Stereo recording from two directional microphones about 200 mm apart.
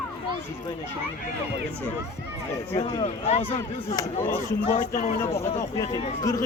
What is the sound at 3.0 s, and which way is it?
A man's voice, 30° left (ahead or behind).